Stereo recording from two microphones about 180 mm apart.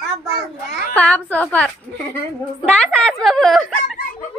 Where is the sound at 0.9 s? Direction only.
5° left (ahead or behind).